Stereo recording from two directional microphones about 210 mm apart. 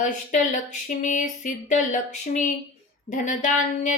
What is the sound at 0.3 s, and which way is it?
Speech, 35° left (ahead or behind).